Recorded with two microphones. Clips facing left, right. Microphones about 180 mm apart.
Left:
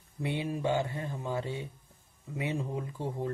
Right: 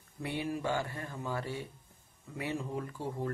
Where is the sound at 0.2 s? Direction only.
20° left (ahead or behind).